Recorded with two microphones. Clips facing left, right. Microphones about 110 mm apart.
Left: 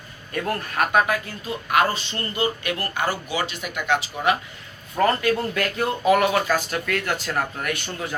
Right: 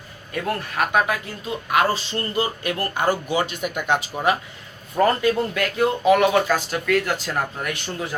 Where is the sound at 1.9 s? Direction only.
30° right (ahead or behind).